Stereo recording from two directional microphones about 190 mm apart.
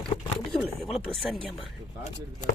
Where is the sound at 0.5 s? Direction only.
Centre (ahead or behind).